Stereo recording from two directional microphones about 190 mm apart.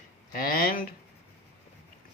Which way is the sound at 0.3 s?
50° left (ahead or behind).